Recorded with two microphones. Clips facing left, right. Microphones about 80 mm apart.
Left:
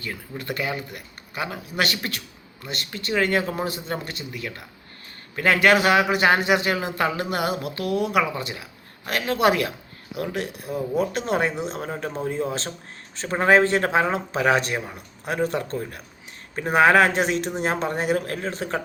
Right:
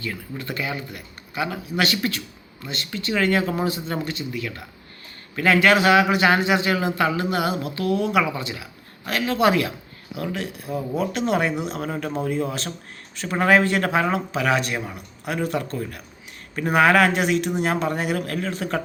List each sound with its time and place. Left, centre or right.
0.0 s speech: left
11.1 s speech: left